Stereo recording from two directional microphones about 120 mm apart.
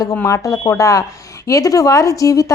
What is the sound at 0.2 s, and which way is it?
A woman's voice, 25° left (ahead or behind).